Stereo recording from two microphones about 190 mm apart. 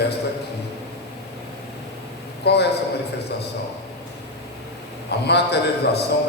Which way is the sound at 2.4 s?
60° left (ahead or behind).